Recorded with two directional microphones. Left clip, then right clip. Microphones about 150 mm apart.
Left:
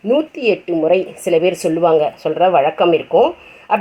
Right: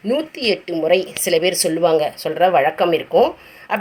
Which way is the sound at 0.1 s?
40° left (ahead or behind).